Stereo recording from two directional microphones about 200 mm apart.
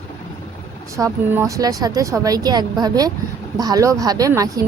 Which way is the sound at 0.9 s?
15° right (ahead or behind).